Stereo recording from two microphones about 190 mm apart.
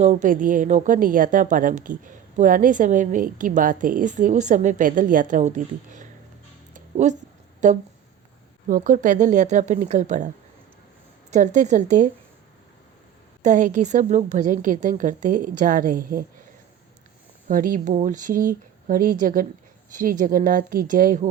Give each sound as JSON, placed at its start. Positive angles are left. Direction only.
{"t": 0.0, "sound": "a woman's voice", "side_deg": -40}
{"t": 6.7, "sound": "music", "side_deg": -40}
{"t": 7.6, "sound": "a woman's voice", "side_deg": -40}
{"t": 13.4, "sound": "a woman's voice", "side_deg": -40}
{"t": 17.5, "sound": "a woman's voice", "side_deg": -45}